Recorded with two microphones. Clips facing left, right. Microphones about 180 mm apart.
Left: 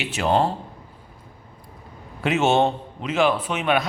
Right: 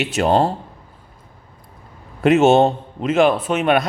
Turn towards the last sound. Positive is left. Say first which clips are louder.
# right 5 dB
turn(degrees=-50)  # may be behind; listen again after turning